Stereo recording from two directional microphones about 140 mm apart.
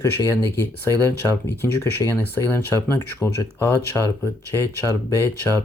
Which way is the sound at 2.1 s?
15° left (ahead or behind).